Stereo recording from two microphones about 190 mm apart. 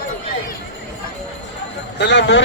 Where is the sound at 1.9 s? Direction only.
65° left (ahead or behind).